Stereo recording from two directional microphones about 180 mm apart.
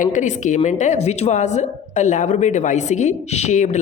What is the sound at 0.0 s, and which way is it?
A woman's voice, 45° left (ahead or behind).